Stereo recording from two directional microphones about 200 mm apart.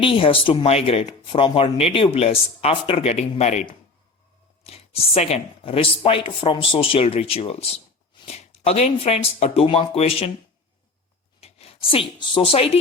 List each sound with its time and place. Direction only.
0.0 s speech: 25° left (ahead or behind)
11.3 s speech: 30° left (ahead or behind)